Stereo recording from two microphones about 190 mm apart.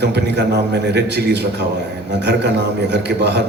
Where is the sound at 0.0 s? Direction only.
60° right (ahead or behind).